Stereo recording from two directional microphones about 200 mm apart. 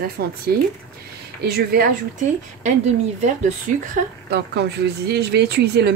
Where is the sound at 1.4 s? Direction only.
50° right (ahead or behind).